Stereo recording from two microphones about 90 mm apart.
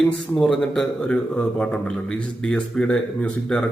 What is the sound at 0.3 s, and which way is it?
Speech, 5° left (ahead or behind).